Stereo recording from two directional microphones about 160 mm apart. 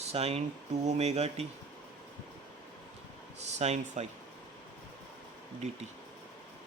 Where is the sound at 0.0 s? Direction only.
40° right (ahead or behind).